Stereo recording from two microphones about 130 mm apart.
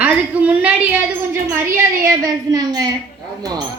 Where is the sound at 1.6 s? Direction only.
25° right (ahead or behind).